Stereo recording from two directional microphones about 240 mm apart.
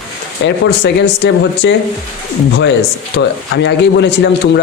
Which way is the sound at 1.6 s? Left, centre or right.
Left.